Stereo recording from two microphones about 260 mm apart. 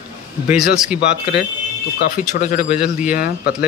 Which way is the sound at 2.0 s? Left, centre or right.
Left.